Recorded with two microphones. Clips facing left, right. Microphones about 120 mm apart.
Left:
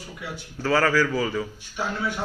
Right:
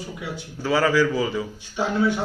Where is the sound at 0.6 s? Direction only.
15° right (ahead or behind).